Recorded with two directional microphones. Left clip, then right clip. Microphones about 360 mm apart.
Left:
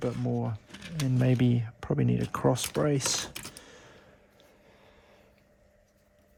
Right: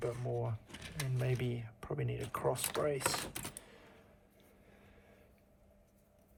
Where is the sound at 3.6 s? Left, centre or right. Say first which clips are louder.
Left 7 dB; left.